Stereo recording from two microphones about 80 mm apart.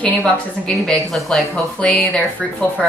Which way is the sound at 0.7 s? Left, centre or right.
Centre.